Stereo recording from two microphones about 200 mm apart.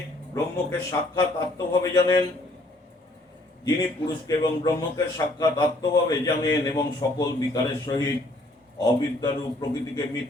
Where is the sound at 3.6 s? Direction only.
20° left (ahead or behind).